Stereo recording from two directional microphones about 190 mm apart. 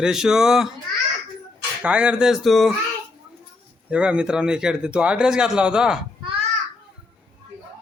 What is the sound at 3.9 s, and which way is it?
Speech, 5° right (ahead or behind).